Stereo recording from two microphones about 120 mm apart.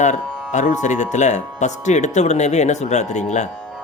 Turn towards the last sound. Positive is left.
turn(degrees=75)  # may be behind; listen again after turning